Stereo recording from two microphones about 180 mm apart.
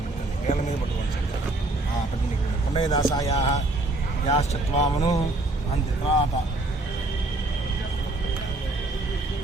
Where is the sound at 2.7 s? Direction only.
20° left (ahead or behind).